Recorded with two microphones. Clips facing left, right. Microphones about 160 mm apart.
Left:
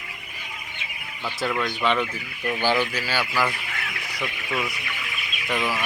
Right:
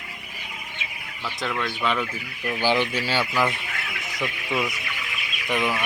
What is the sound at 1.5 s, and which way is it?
Speech, centre (ahead or behind).